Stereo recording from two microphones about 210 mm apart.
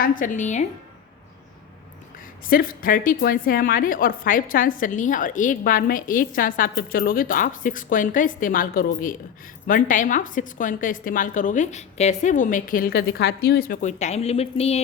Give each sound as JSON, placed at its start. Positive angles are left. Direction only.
{"t": 0.0, "sound": "a woman's voice", "side_deg": 40}
{"t": 2.5, "sound": "a woman's voice", "side_deg": 45}